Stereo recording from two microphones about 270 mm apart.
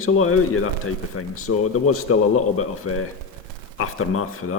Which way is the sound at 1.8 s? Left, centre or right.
Left.